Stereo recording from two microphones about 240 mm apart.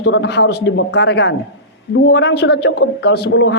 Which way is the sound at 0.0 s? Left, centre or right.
Left.